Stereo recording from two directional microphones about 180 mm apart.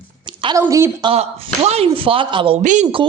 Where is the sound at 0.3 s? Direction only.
25° right (ahead or behind).